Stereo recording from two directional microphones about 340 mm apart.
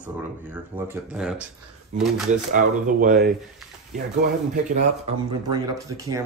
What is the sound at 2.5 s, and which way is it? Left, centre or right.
Speech, right.